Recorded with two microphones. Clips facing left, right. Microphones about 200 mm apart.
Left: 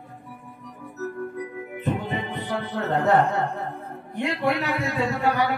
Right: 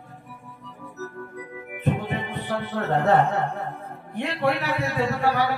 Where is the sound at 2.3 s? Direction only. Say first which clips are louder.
Even; 15° left (ahead or behind).